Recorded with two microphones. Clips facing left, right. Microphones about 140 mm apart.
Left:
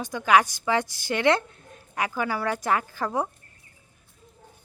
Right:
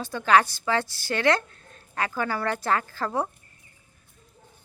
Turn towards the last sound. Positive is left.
turn(degrees=15)  # may be behind; listen again after turning